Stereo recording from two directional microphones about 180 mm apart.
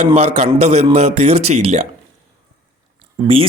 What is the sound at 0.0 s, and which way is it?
Speech, 35° right (ahead or behind).